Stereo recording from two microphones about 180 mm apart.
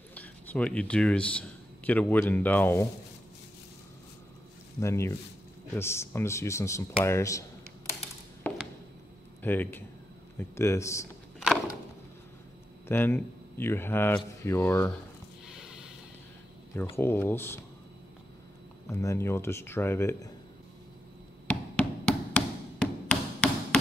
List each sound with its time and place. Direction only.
0.1 s speech: 10° left (ahead or behind)
4.7 s speech: 15° left (ahead or behind)
8.5 s a sound: 10° left (ahead or behind)
9.4 s speech: 10° left (ahead or behind)
12.8 s speech: 10° left (ahead or behind)
15.4 s a sound: 5° right (ahead or behind)
16.9 s speech: 10° left (ahead or behind)
18.9 s speech: 15° left (ahead or behind)
21.5 s a sound: 5° left (ahead or behind)